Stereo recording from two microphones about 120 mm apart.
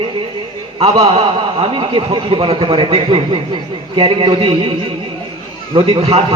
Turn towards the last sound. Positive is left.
turn(degrees=-55)  # may be behind; listen again after turning